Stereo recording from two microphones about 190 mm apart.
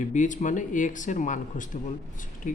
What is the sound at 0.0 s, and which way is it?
Speech, 40° left (ahead or behind).